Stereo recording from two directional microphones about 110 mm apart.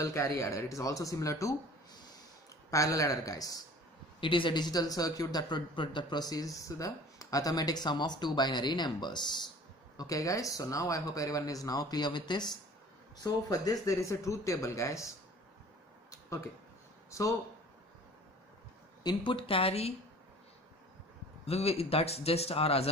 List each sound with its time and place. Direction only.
0.0 s a man's voice: 30° left (ahead or behind)
4.2 s a man's voice: 50° left (ahead or behind)
9.9 s a man's voice: 30° left (ahead or behind)
16.1 s a sound: 30° left (ahead or behind)
17.1 s speech: 30° left (ahead or behind)
19.0 s speech: 50° left (ahead or behind); by 19.9 s 65° left (ahead or behind)
21.5 s speech: 65° left (ahead or behind)